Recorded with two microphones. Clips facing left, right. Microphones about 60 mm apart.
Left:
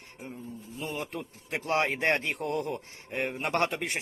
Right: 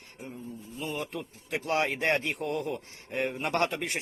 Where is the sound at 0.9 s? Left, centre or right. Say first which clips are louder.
Right 1 dB; left.